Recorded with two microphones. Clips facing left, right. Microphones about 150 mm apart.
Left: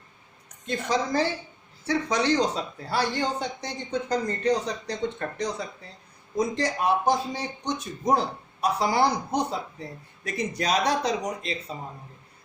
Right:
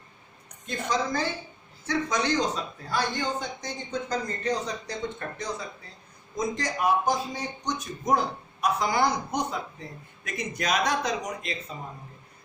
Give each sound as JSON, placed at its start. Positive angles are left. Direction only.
{"t": 0.7, "sound": "speech", "side_deg": 30}
{"t": 4.1, "sound": "speech", "side_deg": 65}
{"t": 6.3, "sound": "a man's voice", "side_deg": 30}